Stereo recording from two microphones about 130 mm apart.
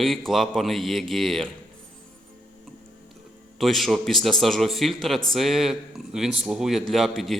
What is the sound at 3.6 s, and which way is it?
A man's voice, centre (ahead or behind).